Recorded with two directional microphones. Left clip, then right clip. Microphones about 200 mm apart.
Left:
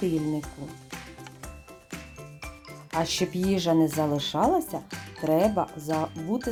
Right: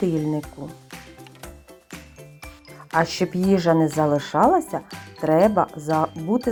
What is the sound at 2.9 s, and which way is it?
Speech, 20° right (ahead or behind).